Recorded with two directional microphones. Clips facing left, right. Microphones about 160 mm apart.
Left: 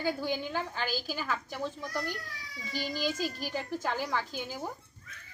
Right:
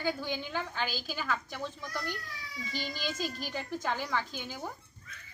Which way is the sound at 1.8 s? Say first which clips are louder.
Left 3 dB; 40° left (ahead or behind).